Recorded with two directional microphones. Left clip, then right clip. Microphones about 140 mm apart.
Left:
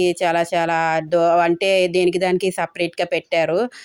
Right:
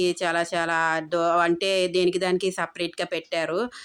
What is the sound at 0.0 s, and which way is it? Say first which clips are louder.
Speech: left 6 dB; 25° left (ahead or behind).